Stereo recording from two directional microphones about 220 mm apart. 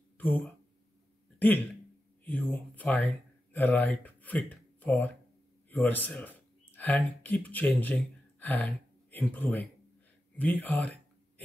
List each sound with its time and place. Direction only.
0.2 s speech: 5° left (ahead or behind)
2.5 s a man's voice: 5° left (ahead or behind)
10.3 s a sound: 5° left (ahead or behind)